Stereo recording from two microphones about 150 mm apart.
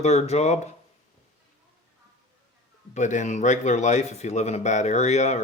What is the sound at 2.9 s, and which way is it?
A man's voice, 55° left (ahead or behind).